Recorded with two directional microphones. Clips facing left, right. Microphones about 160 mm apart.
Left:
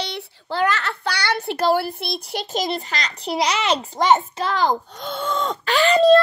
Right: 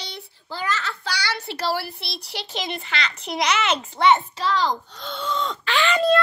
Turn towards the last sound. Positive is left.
turn(degrees=35)  # may be behind; listen again after turning